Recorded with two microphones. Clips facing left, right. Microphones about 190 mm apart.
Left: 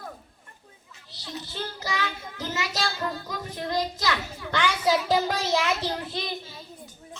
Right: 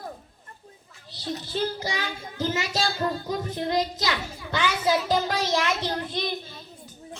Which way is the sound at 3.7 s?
20° right (ahead or behind).